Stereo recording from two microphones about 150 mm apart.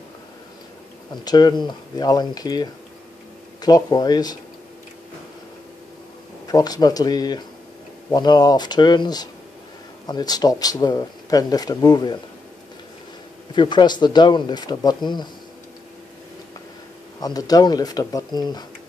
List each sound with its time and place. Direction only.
1.1 s speech: 25° left (ahead or behind)
6.4 s speech: 25° left (ahead or behind)
13.6 s speech: 30° left (ahead or behind)
17.2 s speech: 25° left (ahead or behind)